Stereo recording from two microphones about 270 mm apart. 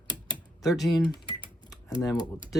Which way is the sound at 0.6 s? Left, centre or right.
Centre.